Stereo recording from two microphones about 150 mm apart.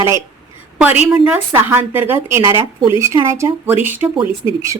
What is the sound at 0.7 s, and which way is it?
A woman's voice, 10° right (ahead or behind).